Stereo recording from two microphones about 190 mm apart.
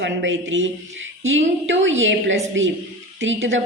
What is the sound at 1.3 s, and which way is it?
A woman's voice, 85° right.